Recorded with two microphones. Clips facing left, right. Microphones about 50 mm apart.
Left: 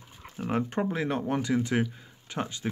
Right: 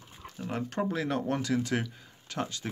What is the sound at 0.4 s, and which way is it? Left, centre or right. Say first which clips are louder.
Speech: left 4 dB; left.